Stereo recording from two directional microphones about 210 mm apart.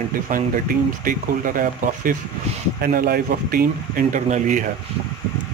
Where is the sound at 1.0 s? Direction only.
40° right (ahead or behind).